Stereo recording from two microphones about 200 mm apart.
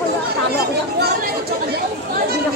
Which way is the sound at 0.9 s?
50° right (ahead or behind).